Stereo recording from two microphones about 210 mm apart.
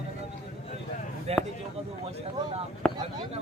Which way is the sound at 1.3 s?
30° right (ahead or behind).